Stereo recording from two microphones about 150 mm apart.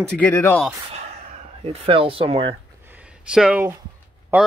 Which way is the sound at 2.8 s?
10° right (ahead or behind).